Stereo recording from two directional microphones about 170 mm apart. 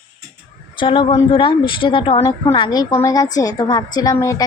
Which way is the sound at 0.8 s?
30° left (ahead or behind).